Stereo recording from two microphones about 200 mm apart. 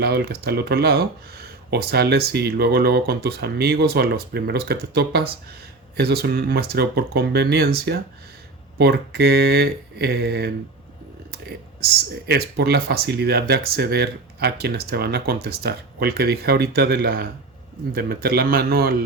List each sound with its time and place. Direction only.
0.0 s speech: 55° right (ahead or behind)
12.3 s speech: 50° right (ahead or behind)